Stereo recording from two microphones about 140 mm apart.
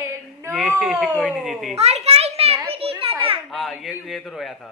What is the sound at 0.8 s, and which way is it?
Cat, 5° right (ahead or behind).